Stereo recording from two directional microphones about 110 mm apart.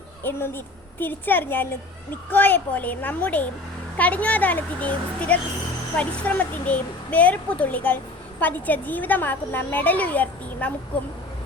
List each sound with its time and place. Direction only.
0.3 s a woman's voice: 20° left (ahead or behind)